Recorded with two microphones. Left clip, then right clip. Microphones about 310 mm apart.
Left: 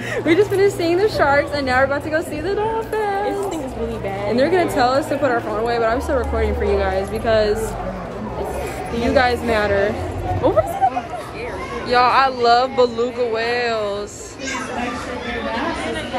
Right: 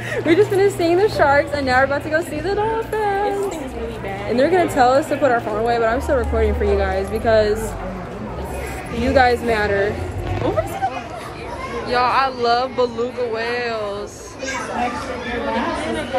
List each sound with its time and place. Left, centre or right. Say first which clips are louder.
0.1 s a woman's voice: right 1 dB; centre
4.3 s a woman's voice: right 1 dB; centre
9.0 s a woman's voice: right 2 dB; centre
11.9 s a woman's voice: left 3 dB; centre
12.8 s a man's voice: left 3 dB; right
13.2 s a woman's voice: left 2 dB; centre